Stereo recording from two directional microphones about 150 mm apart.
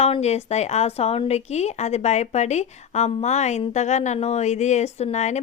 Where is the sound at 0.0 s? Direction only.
45° left (ahead or behind).